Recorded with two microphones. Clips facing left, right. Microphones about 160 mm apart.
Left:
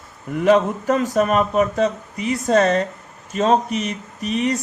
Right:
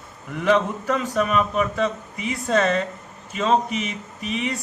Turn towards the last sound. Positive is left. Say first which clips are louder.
# left 6 dB
turn(degrees=40)  # may be behind; listen again after turning